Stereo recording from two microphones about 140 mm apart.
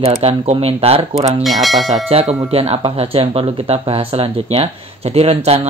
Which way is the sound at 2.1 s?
45° right (ahead or behind).